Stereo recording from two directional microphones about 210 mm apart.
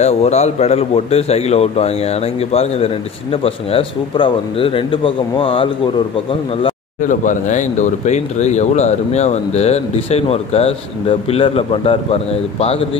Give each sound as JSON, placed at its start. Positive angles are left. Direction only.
{"t": 0.0, "sound": "speech", "side_deg": 30}
{"t": 7.0, "sound": "speech", "side_deg": 40}